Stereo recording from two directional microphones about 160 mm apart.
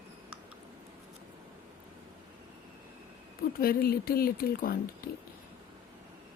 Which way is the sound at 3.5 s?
70° left (ahead or behind).